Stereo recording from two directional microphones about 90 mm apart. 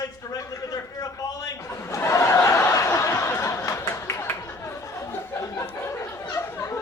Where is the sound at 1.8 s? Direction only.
30° left (ahead or behind).